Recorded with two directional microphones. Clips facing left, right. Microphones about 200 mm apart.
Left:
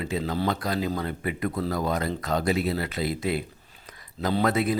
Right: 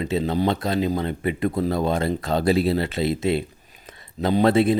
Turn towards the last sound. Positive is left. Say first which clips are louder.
# right 6 dB
turn(degrees=-30)  # may be behind; listen again after turning